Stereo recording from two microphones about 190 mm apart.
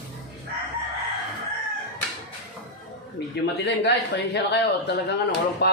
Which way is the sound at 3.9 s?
60° left (ahead or behind).